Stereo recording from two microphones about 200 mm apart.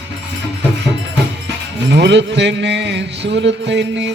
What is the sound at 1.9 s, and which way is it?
Music, 60° right (ahead or behind).